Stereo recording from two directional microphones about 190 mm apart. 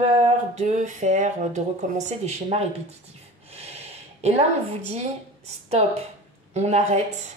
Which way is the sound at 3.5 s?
35° right (ahead or behind).